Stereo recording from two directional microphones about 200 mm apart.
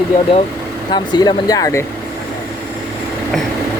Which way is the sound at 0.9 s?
20° left (ahead or behind).